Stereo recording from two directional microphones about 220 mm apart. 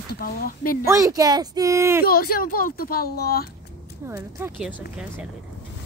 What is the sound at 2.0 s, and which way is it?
Speech, 45° left (ahead or behind).